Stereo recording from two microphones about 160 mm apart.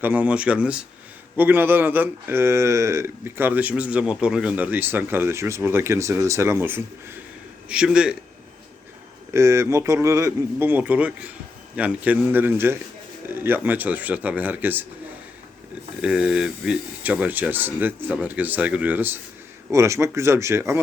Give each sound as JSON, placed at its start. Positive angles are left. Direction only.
{"t": 0.0, "sound": "a man's voice", "side_deg": -10}
{"t": 9.3, "sound": "speech", "side_deg": -20}
{"t": 16.0, "sound": "speech", "side_deg": -5}